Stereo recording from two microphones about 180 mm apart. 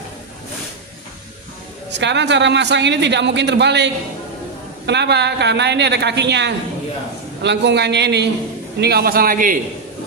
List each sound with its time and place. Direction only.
1.9 s a man's voice: 75° right (ahead or behind); by 9.6 s 50° right (ahead or behind)